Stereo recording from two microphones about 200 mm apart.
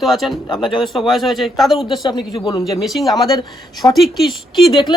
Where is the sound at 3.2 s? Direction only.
20° left (ahead or behind).